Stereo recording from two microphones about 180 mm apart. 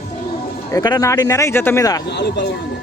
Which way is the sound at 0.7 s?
20° left (ahead or behind).